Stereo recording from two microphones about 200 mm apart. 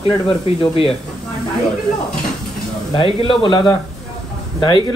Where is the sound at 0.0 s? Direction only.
25° left (ahead or behind).